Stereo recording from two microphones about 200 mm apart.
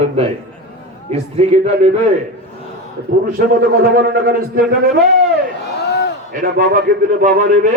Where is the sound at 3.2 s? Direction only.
50° right (ahead or behind).